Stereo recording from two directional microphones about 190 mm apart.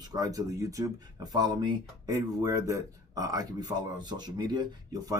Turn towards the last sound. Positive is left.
turn(degrees=-20)  # may be behind; listen again after turning